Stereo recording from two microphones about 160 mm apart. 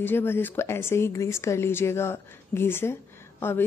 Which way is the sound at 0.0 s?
15° left (ahead or behind).